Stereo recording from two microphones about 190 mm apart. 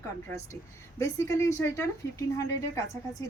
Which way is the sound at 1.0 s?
15° left (ahead or behind).